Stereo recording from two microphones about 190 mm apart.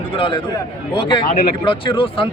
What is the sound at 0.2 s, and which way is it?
Speech, 25° left (ahead or behind).